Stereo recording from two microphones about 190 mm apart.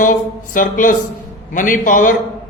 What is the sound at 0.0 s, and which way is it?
A man's voice, 45° left (ahead or behind).